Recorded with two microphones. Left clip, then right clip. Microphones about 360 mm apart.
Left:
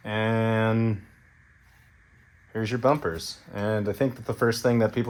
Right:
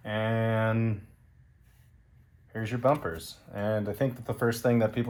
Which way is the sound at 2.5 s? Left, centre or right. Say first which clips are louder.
Left 3 dB; left.